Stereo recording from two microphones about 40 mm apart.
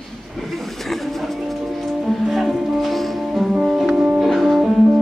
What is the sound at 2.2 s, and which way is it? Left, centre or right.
Music, centre.